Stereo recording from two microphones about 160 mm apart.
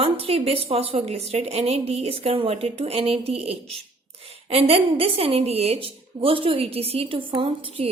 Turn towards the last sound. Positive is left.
turn(degrees=-35)  # may be behind; listen again after turning